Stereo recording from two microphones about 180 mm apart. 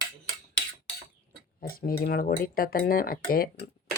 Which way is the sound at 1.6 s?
55° left (ahead or behind).